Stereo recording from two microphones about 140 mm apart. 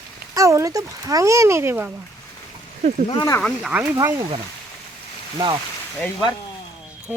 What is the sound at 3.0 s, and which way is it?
Speech, 30° left (ahead or behind).